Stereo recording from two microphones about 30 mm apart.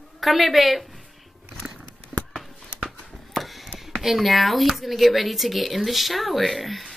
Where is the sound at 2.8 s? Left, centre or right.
Centre.